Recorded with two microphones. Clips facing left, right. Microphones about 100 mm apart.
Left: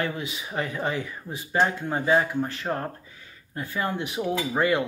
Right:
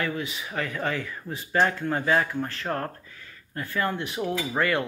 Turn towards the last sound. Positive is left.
turn(degrees=20)  # may be behind; listen again after turning